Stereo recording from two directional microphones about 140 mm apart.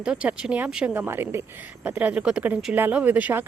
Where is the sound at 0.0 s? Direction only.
5° right (ahead or behind).